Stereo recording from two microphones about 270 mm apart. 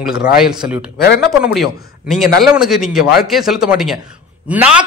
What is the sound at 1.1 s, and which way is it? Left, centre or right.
Speech, centre.